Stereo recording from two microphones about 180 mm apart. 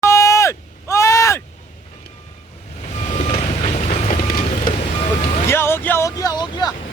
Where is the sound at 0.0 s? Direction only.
15° left (ahead or behind).